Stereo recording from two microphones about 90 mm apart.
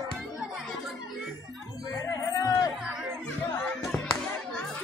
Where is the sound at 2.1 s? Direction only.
40° left (ahead or behind).